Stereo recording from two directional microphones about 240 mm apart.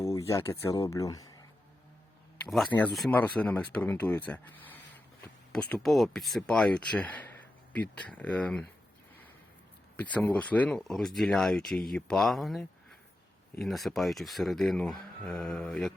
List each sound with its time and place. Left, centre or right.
0.0 s speech: centre
2.5 s speech: centre
10.0 s speech: centre